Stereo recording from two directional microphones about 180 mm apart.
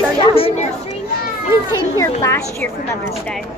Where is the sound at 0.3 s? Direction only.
30° left (ahead or behind).